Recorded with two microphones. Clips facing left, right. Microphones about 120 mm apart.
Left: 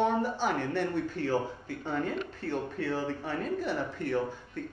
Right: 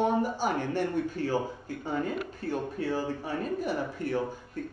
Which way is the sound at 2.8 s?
40° right (ahead or behind).